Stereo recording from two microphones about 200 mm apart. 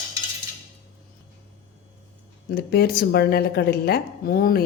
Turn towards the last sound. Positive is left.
turn(degrees=50)  # may be behind; listen again after turning